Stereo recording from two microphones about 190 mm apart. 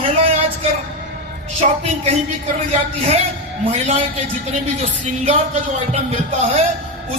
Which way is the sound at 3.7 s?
35° right (ahead or behind).